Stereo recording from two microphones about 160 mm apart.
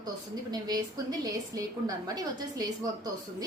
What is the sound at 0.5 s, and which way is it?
A woman's voice, 25° right (ahead or behind).